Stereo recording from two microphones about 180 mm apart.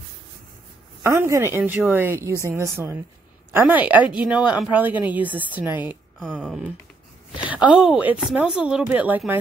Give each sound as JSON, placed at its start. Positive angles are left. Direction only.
{"t": 1.0, "sound": "speech", "side_deg": -15}
{"t": 6.1, "sound": "speech", "side_deg": 5}